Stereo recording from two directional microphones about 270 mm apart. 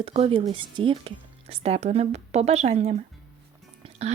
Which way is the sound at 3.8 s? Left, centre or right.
Right.